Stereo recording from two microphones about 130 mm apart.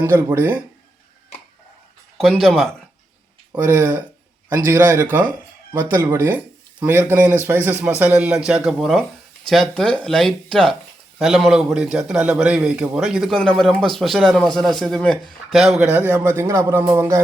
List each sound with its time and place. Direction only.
0.0 s a man's voice: 15° right (ahead or behind)
2.1 s a man's voice: 5° left (ahead or behind)
3.7 s a man's voice: 20° right (ahead or behind)